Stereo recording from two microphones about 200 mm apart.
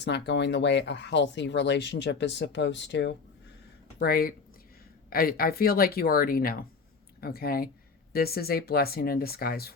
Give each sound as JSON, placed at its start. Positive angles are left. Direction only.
{"t": 0.0, "sound": "speech", "side_deg": 60}
{"t": 3.9, "sound": "speech", "side_deg": 50}